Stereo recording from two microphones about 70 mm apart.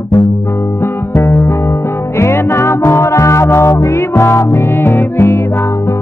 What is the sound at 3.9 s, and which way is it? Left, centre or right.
Music, left.